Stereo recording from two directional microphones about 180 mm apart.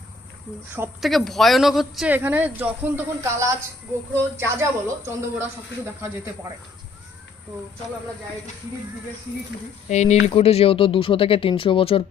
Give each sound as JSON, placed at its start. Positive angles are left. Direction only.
{"t": 1.0, "sound": "speech", "side_deg": 0}
{"t": 9.9, "sound": "speech", "side_deg": 40}